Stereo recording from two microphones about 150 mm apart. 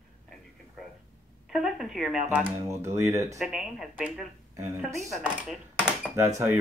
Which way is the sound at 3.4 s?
Centre (ahead or behind).